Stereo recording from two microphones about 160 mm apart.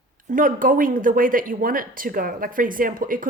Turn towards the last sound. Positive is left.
turn(degrees=-60)  # may be behind; listen again after turning